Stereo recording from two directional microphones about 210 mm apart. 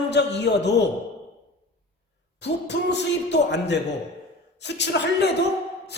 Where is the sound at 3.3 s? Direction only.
55° left (ahead or behind).